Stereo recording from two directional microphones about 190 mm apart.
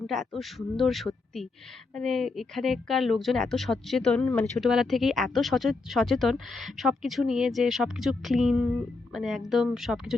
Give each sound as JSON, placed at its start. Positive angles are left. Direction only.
{"t": 0.1, "sound": "a woman's voice", "side_deg": 0}